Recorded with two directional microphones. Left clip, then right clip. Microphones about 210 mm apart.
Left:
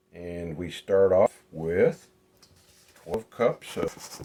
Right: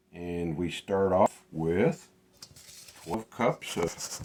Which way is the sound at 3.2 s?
15° left (ahead or behind).